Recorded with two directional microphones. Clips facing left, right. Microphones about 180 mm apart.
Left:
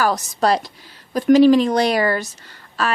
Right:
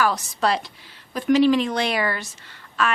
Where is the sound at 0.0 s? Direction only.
40° left (ahead or behind).